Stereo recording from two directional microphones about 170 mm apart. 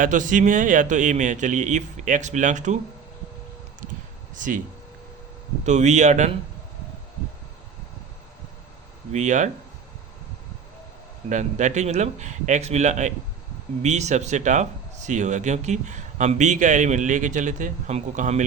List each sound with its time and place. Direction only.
0.0 s speech: 50° right (ahead or behind)
4.4 s speech: 50° right (ahead or behind)
5.6 s speech: 45° right (ahead or behind)
9.1 s speech: 45° right (ahead or behind)
11.3 s speech: 45° right (ahead or behind)